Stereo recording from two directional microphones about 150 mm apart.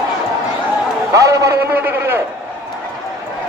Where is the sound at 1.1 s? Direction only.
20° right (ahead or behind).